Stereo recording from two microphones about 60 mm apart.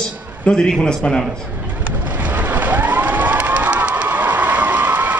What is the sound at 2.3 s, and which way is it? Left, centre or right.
Cheering, right.